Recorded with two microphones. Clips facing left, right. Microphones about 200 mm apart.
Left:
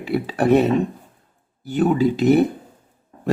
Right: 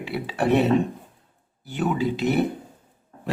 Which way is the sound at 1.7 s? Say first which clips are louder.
Left 7 dB; 45° left (ahead or behind).